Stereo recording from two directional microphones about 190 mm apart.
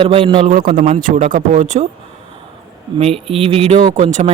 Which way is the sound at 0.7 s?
40° right (ahead or behind).